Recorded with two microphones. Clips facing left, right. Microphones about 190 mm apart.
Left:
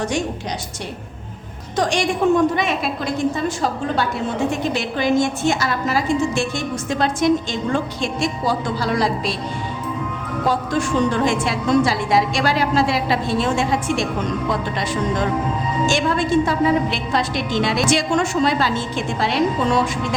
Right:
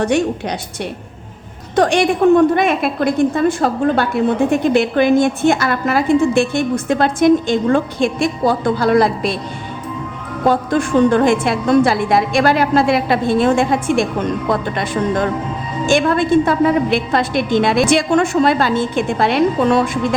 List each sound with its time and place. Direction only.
0.0 s a woman's voice: 60° right (ahead or behind)
1.7 s a woman's voice: 60° right (ahead or behind)
10.4 s a woman's voice: 55° right (ahead or behind)